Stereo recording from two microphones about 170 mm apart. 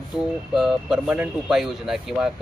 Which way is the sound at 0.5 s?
5° right (ahead or behind).